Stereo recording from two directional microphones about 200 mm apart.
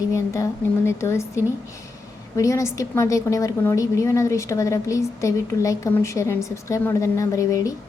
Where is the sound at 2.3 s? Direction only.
15° left (ahead or behind).